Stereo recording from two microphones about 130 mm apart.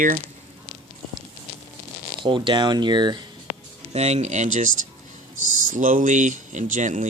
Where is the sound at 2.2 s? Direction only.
40° right (ahead or behind).